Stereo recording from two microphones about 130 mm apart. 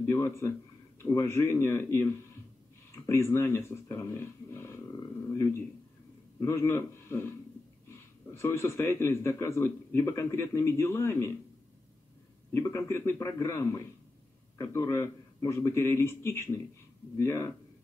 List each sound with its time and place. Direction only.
0.1 s a man's voice: 20° left (ahead or behind)
5.3 s a sound: 20° left (ahead or behind)
6.4 s a man's voice: 20° left (ahead or behind)
12.6 s a man's voice: 20° left (ahead or behind)